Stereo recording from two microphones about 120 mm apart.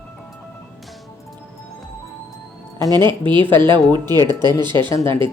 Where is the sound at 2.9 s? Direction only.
40° right (ahead or behind).